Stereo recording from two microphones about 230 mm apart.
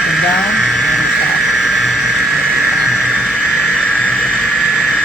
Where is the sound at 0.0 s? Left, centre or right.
Centre.